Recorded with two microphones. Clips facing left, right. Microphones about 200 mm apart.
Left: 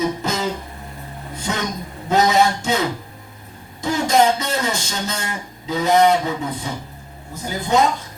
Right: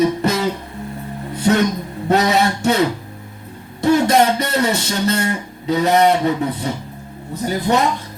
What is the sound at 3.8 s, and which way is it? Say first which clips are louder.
Speech: right 3 dB; 60° right (ahead or behind).